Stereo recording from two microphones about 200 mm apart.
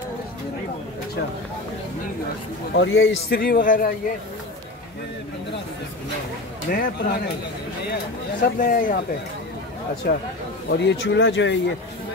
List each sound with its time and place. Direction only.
2.7 s speech: 70° left (ahead or behind)
3.3 s speech: 45° left (ahead or behind)
6.7 s speech: 55° left (ahead or behind)
8.4 s speech: 45° left (ahead or behind)
10.0 s speech: 55° left (ahead or behind)